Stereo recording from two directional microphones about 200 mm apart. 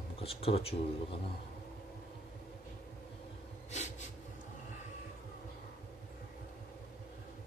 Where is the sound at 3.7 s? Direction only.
35° left (ahead or behind).